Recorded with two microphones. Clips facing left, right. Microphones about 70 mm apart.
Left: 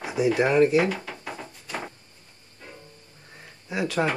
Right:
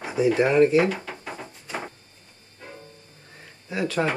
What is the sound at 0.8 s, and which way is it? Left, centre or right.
Drawer open or close, centre.